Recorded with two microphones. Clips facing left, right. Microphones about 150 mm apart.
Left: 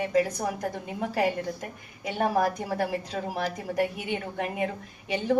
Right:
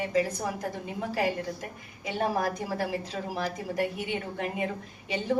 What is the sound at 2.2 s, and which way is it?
A woman's voice, 50° left (ahead or behind).